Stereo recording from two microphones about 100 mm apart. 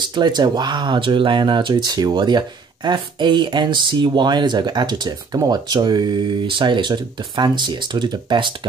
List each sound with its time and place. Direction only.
0.1 s speech: 45° right (ahead or behind)